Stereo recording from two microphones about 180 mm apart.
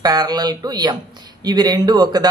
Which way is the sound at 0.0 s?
20° right (ahead or behind).